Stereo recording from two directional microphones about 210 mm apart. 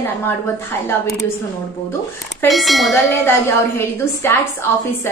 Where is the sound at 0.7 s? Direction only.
10° left (ahead or behind).